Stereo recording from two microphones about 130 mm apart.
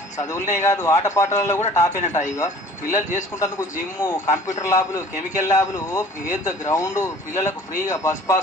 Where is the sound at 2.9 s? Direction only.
70° left (ahead or behind).